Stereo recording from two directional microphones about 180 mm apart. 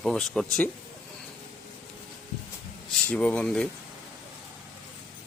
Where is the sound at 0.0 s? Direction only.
5° left (ahead or behind).